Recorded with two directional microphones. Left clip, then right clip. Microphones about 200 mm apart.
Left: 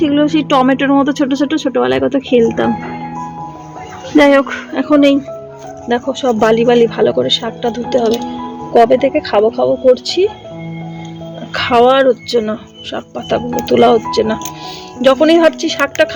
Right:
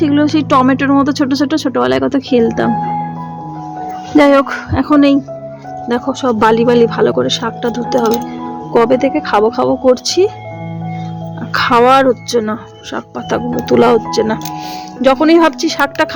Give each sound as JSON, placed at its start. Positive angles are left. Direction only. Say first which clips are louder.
{"t": 0.0, "sound": "speech", "louder": "even", "side_deg": -5}
{"t": 4.1, "sound": "speech", "louder": "even", "side_deg": -5}
{"t": 11.5, "sound": "speech", "louder": "right 1 dB", "side_deg": -20}